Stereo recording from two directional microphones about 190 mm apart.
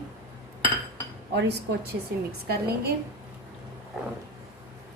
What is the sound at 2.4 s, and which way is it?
Speech, 55° right (ahead or behind).